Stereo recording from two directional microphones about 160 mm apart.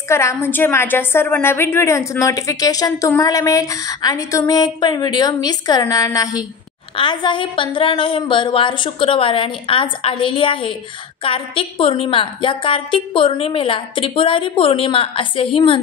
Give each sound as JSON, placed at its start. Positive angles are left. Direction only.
{"t": 0.1, "sound": "a woman's voice", "side_deg": 15}